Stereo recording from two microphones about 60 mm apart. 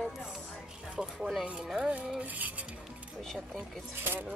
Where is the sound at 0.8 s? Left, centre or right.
Centre.